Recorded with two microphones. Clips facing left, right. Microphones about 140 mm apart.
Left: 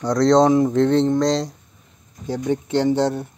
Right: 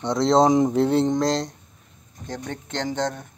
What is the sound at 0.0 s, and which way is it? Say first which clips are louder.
Speech: left 3 dB; centre (ahead or behind).